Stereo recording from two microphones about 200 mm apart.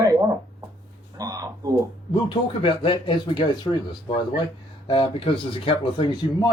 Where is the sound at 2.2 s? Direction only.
25° left (ahead or behind).